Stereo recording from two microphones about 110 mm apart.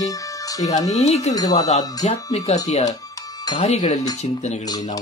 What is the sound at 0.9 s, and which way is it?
Speech, 90° left.